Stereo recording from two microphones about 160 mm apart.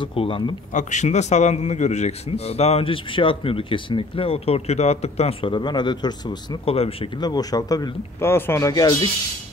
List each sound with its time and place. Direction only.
0.0 s a man's voice: 35° left (ahead or behind)
0.7 s a man's voice: 50° left (ahead or behind)
7.2 s speech: 25° left (ahead or behind)